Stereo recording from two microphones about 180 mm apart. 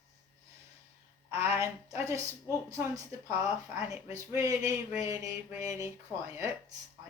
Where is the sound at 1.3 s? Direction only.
15° right (ahead or behind).